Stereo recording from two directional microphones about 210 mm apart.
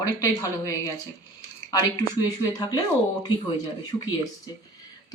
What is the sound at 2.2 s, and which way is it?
Speech, 20° left (ahead or behind).